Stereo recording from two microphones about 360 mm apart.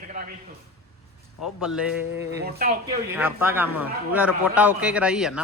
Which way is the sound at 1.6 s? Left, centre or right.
Centre.